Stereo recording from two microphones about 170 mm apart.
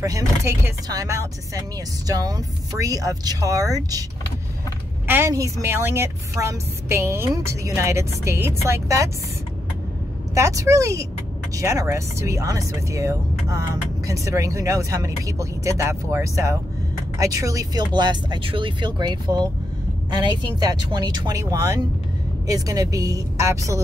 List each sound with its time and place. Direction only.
0.0 s speech: 20° right (ahead or behind)
5.0 s speech: 15° right (ahead or behind)
10.3 s speech: 20° right (ahead or behind)